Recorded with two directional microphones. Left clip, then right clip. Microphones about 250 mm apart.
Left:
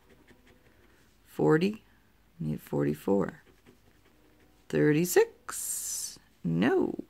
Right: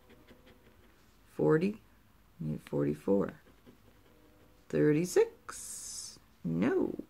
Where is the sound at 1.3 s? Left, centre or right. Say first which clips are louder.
Left 3 dB; left.